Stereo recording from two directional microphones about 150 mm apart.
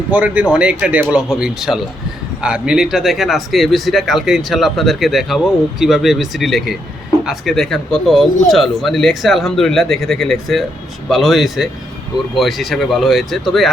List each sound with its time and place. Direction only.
0.1 s speech: 10° right (ahead or behind)